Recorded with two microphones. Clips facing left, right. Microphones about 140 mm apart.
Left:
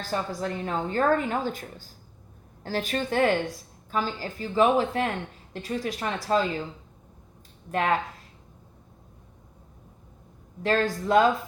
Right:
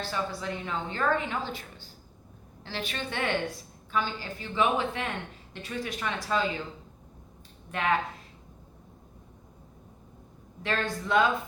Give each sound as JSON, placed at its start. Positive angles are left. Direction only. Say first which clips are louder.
{"t": 0.0, "sound": "a woman's voice", "louder": "left 3 dB", "side_deg": 45}
{"t": 7.7, "sound": "a woman's voice", "louder": "left 3 dB", "side_deg": 40}
{"t": 10.6, "sound": "a woman's voice", "louder": "left 6 dB", "side_deg": 40}